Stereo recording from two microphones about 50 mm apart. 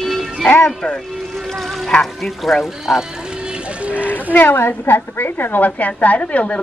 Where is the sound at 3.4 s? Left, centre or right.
Right.